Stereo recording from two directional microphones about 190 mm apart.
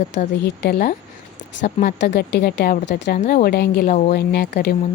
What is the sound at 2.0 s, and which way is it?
A woman's voice, 65° left (ahead or behind).